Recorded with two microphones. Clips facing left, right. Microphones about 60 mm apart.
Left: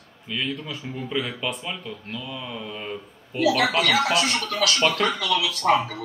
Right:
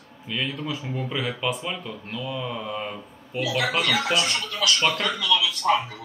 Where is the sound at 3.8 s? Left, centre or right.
Left.